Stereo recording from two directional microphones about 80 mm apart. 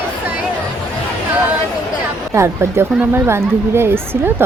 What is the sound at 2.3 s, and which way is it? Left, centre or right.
A woman's voice, right.